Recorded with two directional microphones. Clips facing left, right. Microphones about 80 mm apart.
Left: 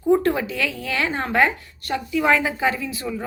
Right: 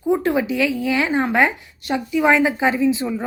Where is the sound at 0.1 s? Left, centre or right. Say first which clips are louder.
Even; centre.